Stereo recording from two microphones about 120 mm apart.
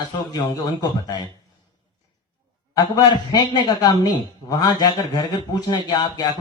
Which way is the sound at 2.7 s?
35° left (ahead or behind).